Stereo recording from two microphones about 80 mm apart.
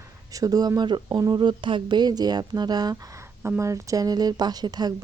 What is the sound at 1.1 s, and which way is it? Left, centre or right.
Speech, right.